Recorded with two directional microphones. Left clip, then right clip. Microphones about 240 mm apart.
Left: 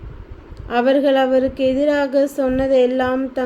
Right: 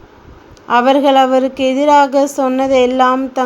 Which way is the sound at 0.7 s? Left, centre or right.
Centre.